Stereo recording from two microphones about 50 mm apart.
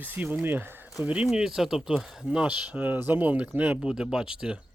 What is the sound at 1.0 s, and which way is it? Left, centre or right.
Speech, right.